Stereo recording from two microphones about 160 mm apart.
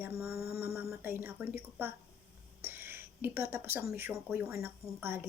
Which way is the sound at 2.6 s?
15° right (ahead or behind).